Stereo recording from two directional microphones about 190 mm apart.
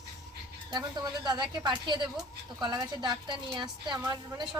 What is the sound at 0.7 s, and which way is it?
A woman's voice, 20° right (ahead or behind).